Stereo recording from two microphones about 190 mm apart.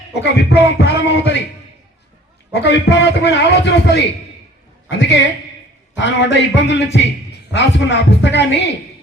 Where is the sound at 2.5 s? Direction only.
60° left (ahead or behind).